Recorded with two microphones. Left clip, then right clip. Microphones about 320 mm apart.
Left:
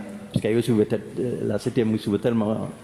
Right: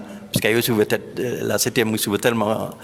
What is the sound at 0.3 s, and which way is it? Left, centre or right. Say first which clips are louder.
Speech: right 4 dB; right.